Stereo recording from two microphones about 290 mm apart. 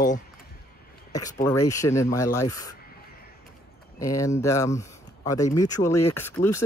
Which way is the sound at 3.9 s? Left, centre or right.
Centre.